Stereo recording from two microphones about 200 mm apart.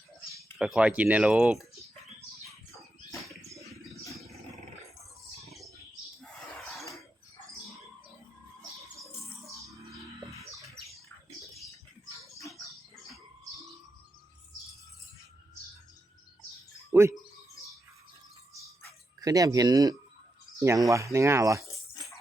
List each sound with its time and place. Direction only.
0.6 s speech: 5° right (ahead or behind)
16.9 s speech: 15° right (ahead or behind)
19.2 s speech: 15° right (ahead or behind)